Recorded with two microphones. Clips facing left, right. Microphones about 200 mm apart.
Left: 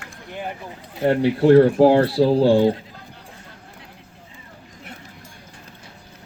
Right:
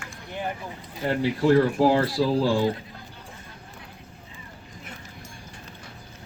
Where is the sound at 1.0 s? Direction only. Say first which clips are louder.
Left 7 dB; 65° left (ahead or behind).